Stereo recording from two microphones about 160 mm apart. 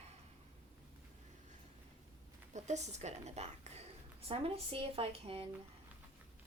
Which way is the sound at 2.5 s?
45° right (ahead or behind).